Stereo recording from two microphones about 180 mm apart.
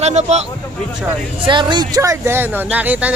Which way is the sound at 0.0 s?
40° right (ahead or behind).